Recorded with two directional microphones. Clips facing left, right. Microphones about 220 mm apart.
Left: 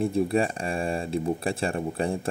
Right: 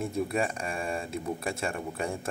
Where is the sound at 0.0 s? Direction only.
30° left (ahead or behind).